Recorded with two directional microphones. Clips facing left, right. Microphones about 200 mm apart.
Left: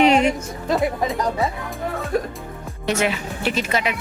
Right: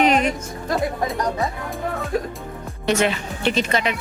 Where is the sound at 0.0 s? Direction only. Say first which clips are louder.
Left 2 dB; 25° left (ahead or behind).